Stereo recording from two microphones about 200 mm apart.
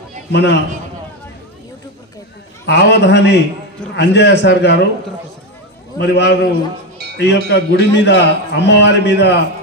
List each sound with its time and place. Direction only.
0.3 s a man's voice: 60° left (ahead or behind)
2.6 s a man's voice: 60° left (ahead or behind)
5.9 s a man's voice: 60° left (ahead or behind)